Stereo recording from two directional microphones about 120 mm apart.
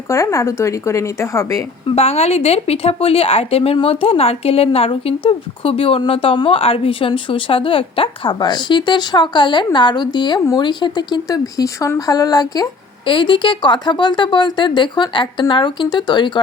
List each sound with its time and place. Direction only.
0.1 s a woman's voice: 25° left (ahead or behind)
2.0 s speech: 60° left (ahead or behind); by 12.6 s 30° left (ahead or behind)
13.1 s speech: 45° left (ahead or behind)